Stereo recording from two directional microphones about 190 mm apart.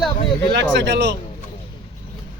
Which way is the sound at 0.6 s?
65° right (ahead or behind).